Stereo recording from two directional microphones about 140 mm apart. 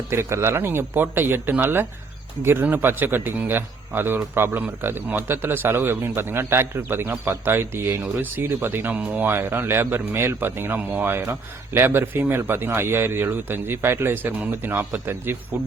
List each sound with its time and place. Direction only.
0.1 s speech: 20° right (ahead or behind)